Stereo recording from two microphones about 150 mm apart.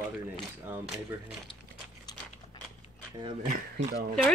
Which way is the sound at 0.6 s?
15° right (ahead or behind).